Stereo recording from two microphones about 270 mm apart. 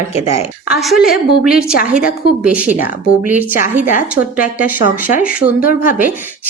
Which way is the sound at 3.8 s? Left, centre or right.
Left.